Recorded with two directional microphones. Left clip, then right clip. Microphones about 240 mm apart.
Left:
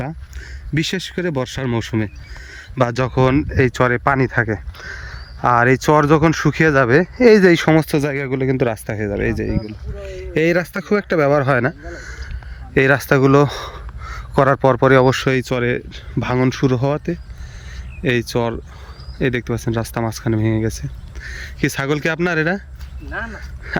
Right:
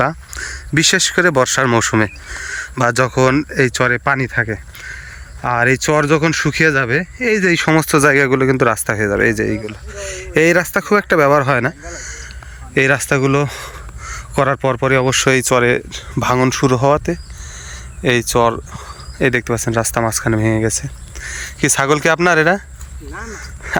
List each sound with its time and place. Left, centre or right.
0.0 s speech: centre
8.0 s speech: right
8.4 s speech: centre